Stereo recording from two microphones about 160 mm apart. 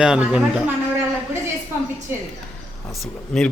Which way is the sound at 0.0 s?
5° right (ahead or behind).